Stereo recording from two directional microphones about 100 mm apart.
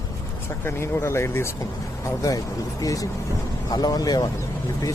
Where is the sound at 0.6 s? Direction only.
25° left (ahead or behind).